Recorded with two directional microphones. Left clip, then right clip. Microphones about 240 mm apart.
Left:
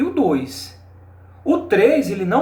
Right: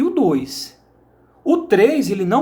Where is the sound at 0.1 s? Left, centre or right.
Right.